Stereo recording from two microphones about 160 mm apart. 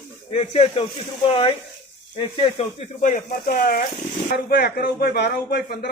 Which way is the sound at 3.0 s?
55° left (ahead or behind).